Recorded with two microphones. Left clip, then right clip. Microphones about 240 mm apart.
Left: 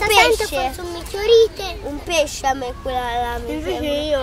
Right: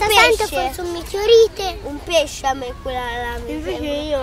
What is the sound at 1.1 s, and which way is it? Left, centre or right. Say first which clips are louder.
Speech: right 1 dB; right.